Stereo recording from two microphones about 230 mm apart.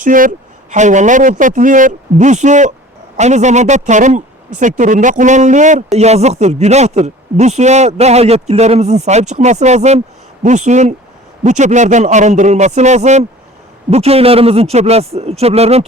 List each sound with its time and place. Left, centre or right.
0.0 s speech: right